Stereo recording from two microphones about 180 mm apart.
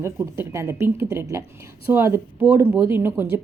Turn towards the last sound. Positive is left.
turn(degrees=-10)  # may be behind; listen again after turning